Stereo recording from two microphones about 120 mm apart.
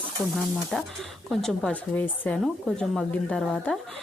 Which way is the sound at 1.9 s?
15° left (ahead or behind).